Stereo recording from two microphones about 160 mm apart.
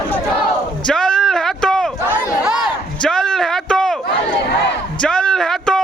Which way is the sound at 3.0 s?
5° left (ahead or behind).